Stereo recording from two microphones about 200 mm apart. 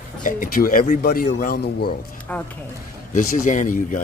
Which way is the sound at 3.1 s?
40° left (ahead or behind).